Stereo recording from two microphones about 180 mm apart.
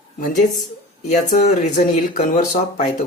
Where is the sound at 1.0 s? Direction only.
40° left (ahead or behind).